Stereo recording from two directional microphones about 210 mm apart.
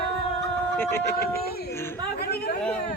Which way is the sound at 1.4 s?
50° left (ahead or behind).